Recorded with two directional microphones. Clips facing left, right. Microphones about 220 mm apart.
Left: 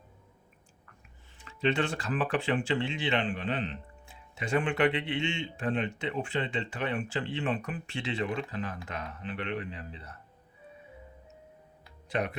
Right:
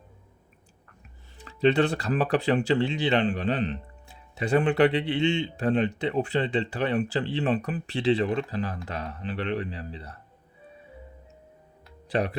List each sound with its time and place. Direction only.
1.4 s speech: 35° right (ahead or behind)
12.0 s speech: 35° right (ahead or behind)